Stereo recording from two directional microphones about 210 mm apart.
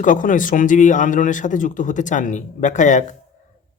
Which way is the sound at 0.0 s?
40° left (ahead or behind).